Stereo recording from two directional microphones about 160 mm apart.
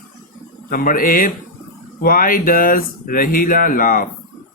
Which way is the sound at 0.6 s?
60° left (ahead or behind).